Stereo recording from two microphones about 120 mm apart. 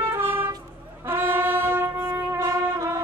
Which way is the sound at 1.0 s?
15° right (ahead or behind).